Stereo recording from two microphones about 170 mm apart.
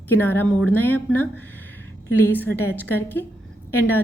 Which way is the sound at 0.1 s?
10° left (ahead or behind).